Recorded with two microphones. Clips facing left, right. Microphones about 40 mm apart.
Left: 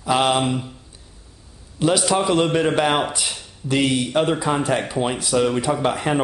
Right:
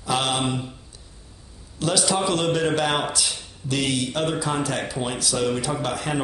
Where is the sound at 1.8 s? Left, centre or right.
Centre.